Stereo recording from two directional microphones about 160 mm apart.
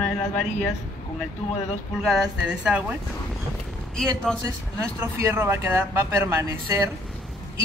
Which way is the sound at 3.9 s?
5° left (ahead or behind).